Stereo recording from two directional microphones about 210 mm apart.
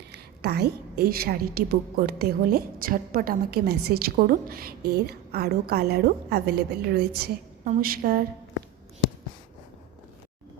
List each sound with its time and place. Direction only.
0.1 s a woman's voice: 50° right (ahead or behind)